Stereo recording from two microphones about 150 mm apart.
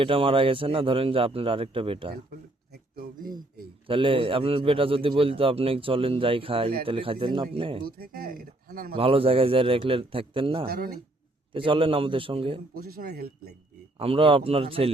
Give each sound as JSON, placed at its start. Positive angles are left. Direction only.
{"t": 0.0, "sound": "a man's voice", "side_deg": -35}
{"t": 2.7, "sound": "a sound", "side_deg": -85}
{"t": 3.8, "sound": "a man's voice", "side_deg": -35}
{"t": 7.9, "sound": "speech", "side_deg": -85}
{"t": 9.0, "sound": "a man's voice", "side_deg": -40}
{"t": 10.7, "sound": "speech", "side_deg": -90}
{"t": 11.5, "sound": "a man's voice", "side_deg": -35}
{"t": 12.7, "sound": "speech", "side_deg": -85}
{"t": 14.0, "sound": "a man's voice", "side_deg": -35}